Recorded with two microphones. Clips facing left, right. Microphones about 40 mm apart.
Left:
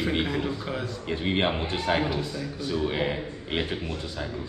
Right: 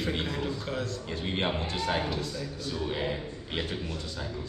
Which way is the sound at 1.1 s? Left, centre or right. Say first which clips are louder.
Left 6 dB; left.